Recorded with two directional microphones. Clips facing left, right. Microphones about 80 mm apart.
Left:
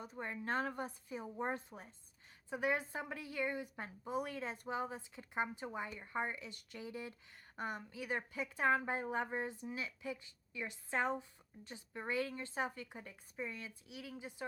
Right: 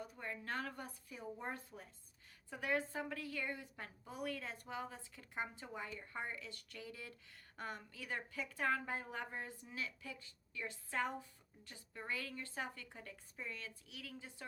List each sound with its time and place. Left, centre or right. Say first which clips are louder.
0.0 s a woman's voice: left 3 dB; left